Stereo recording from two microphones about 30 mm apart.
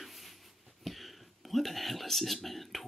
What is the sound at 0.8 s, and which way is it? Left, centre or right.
Speech, centre.